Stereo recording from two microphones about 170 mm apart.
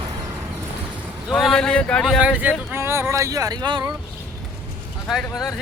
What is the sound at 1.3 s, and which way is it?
Speech, centre (ahead or behind).